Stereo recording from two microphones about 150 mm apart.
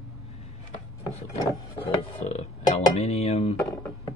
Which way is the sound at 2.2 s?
50° left (ahead or behind).